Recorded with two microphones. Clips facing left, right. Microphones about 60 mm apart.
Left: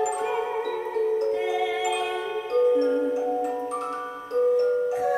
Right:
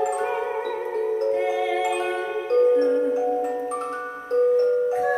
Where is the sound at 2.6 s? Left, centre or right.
Right.